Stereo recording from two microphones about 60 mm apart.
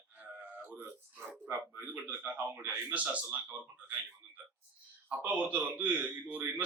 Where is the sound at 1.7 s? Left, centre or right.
Right.